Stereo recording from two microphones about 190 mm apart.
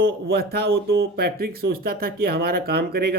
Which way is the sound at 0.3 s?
55° right (ahead or behind).